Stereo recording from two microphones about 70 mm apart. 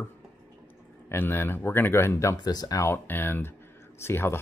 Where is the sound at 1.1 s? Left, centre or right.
Left.